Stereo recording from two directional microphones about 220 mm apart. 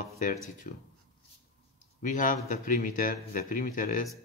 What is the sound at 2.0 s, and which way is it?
Speech, 35° left (ahead or behind).